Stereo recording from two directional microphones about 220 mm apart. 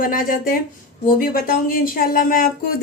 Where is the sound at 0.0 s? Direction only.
40° left (ahead or behind).